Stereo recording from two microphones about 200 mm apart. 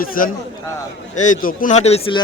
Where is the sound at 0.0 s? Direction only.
45° left (ahead or behind).